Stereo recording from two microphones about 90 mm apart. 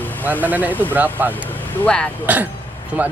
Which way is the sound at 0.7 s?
20° left (ahead or behind).